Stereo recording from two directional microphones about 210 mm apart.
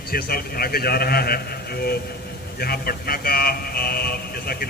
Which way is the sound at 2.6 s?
45° left (ahead or behind).